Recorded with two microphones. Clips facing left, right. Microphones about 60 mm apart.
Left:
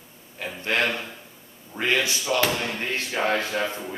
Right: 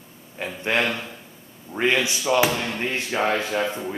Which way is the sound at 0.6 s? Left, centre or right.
Right.